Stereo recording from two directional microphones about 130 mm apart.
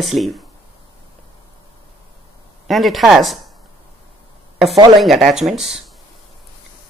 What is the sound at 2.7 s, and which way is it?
Speech, centre (ahead or behind).